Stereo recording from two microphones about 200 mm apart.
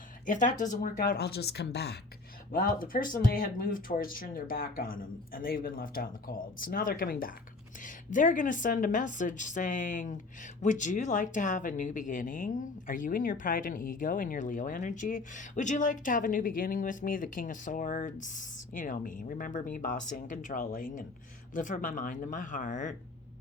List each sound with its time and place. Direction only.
0.3 s speech: 40° left (ahead or behind)
2.5 s a woman's voice: 45° left (ahead or behind)